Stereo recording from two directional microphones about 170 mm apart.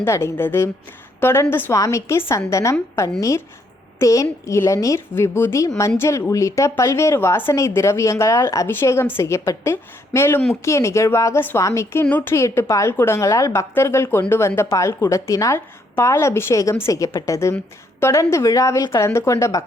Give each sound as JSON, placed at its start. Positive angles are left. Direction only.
{"t": 0.0, "sound": "a woman's voice", "side_deg": 15}